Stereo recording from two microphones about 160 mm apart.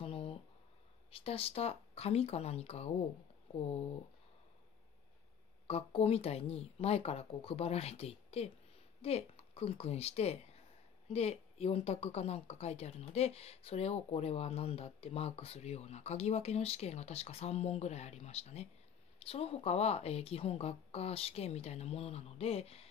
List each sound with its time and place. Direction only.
0.0 s a sound: 35° left (ahead or behind)
1.1 s speech: 35° left (ahead or behind)
5.7 s speech: 40° left (ahead or behind)